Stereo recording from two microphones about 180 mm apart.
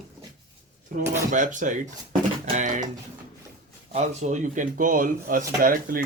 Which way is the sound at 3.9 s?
40° right (ahead or behind).